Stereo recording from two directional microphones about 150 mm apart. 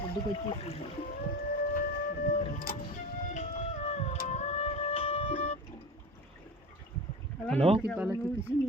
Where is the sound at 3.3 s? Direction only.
50° left (ahead or behind).